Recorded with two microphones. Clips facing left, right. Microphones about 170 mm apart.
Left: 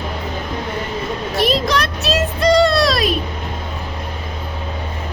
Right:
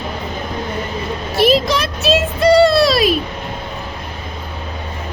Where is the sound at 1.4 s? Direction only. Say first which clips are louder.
Right 4 dB; centre (ahead or behind).